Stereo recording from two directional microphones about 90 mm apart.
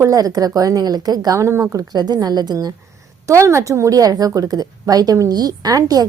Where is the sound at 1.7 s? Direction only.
50° right (ahead or behind).